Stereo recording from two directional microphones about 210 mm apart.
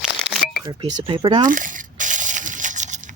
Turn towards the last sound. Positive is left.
turn(degrees=-35)  # may be behind; listen again after turning